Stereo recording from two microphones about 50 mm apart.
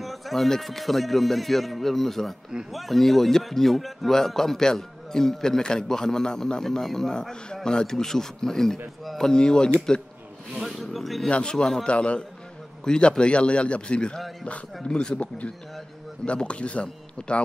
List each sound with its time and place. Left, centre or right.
0.0 s a man's voice: centre
9.0 s a sound: centre
9.3 s a man's voice: centre
10.6 s speech: centre
11.2 s a man's voice: left
11.5 s a man's voice: centre
11.8 s a man's voice: left